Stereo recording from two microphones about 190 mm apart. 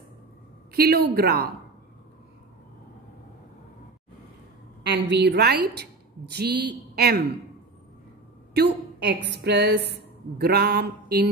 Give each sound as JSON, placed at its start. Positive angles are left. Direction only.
{"t": 0.7, "sound": "a woman's voice", "side_deg": -55}
{"t": 4.8, "sound": "a woman's voice", "side_deg": -65}
{"t": 8.5, "sound": "a woman's voice", "side_deg": -60}